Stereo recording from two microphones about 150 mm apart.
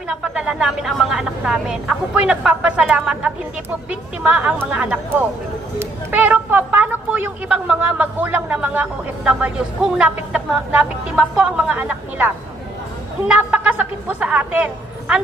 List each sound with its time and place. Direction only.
0.1 s a woman's voice: 5° right (ahead or behind)